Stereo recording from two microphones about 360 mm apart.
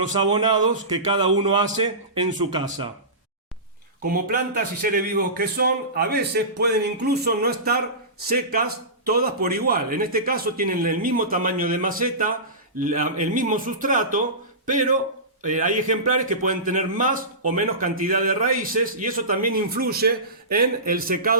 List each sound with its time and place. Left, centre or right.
0.1 s a man's voice: centre
4.0 s a man's voice: right